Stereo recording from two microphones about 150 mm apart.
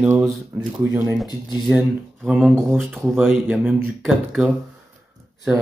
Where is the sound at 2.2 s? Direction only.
5° right (ahead or behind).